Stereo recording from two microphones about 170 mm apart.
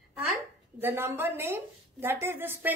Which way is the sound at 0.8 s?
15° right (ahead or behind).